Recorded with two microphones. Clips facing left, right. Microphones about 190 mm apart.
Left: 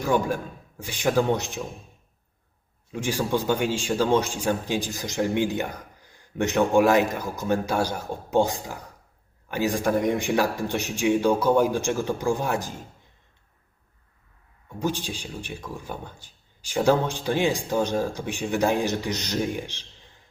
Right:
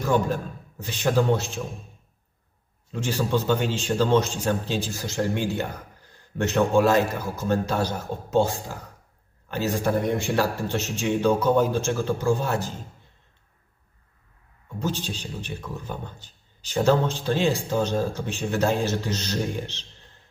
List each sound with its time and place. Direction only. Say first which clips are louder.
0.0 s a man's voice: even; 15° left (ahead or behind)
2.9 s a man's voice: even; 15° left (ahead or behind)
14.8 s a man's voice: left 1 dB; 15° left (ahead or behind)